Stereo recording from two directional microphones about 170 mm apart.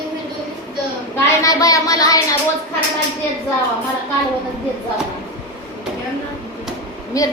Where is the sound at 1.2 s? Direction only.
20° left (ahead or behind).